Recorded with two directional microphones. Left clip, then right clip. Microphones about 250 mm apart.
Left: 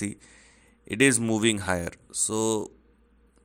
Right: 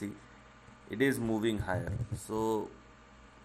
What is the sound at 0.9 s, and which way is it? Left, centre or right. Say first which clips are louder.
Speech: left 8 dB; left.